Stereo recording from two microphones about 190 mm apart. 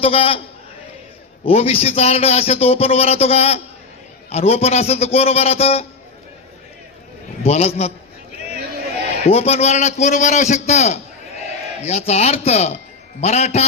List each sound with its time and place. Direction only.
0.0 s a man's voice: 30° left (ahead or behind)
1.5 s a man's voice: 30° left (ahead or behind)
7.4 s a man's voice: 35° left (ahead or behind)
9.2 s a man's voice: 35° left (ahead or behind)